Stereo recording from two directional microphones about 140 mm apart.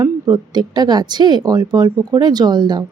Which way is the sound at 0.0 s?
30° right (ahead or behind).